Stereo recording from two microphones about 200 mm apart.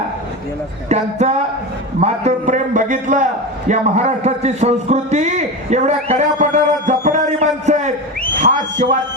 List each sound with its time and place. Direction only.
0.9 s a man's voice: 35° right (ahead or behind)